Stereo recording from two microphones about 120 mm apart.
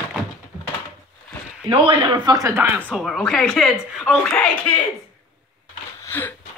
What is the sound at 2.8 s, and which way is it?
Speech, centre (ahead or behind).